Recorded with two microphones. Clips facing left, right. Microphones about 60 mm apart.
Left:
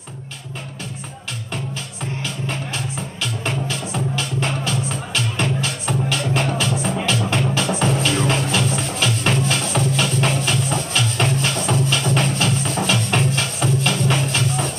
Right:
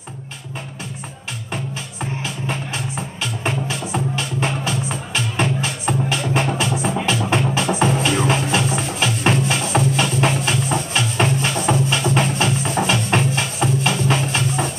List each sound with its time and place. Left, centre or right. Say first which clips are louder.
2.2 s music: right 1 dB; centre